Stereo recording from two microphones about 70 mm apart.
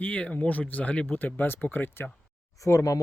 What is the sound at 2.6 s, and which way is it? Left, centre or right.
Speech, left.